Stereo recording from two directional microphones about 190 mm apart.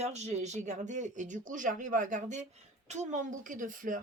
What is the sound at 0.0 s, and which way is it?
Speech, 35° right (ahead or behind).